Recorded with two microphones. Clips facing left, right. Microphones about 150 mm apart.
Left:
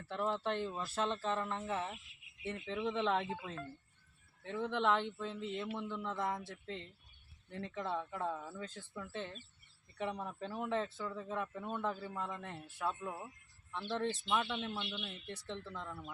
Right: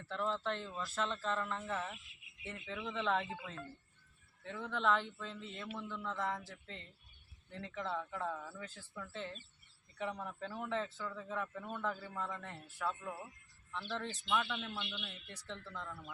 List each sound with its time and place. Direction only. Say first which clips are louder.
0.1 s a man's voice: left 2 dB; 20° left (ahead or behind)
4.4 s a man's voice: left 2 dB; 15° left (ahead or behind)